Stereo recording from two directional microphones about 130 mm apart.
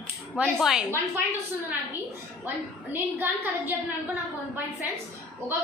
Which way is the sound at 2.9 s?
15° right (ahead or behind).